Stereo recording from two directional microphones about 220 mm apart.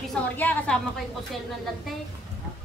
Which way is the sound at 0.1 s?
10° left (ahead or behind).